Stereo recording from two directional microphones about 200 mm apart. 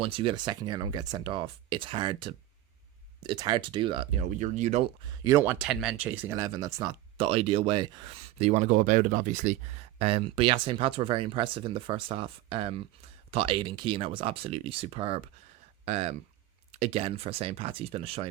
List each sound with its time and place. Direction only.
0.0 s speech: 25° right (ahead or behind)
4.4 s speech: 35° right (ahead or behind)
5.2 s speech: 15° right (ahead or behind)